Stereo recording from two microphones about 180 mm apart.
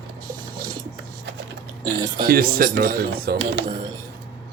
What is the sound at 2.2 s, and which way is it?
Speech, 55° right (ahead or behind).